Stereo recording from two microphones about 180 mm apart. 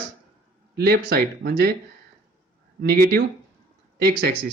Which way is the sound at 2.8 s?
55° right (ahead or behind).